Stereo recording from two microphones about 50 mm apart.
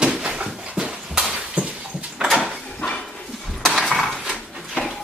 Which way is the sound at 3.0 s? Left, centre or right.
Centre.